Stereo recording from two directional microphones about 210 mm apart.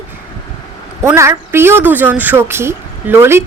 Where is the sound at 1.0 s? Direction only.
15° right (ahead or behind).